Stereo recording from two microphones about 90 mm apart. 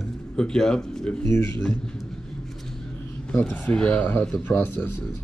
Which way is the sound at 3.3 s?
20° left (ahead or behind).